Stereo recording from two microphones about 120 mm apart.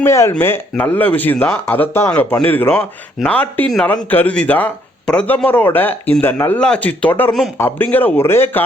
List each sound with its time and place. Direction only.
0.0 s speech: 25° left (ahead or behind)